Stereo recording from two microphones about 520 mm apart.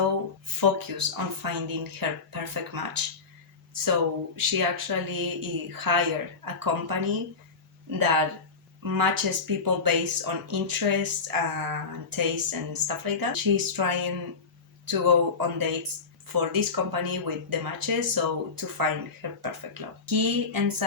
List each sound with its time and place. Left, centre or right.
0.6 s speech: right
4.4 s speech: right